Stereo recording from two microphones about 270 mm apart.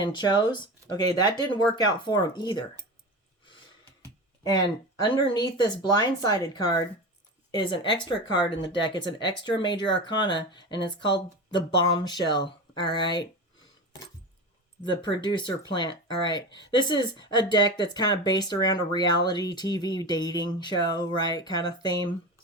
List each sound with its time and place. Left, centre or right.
0.0 s speech: centre
4.4 s speech: centre
14.8 s speech: centre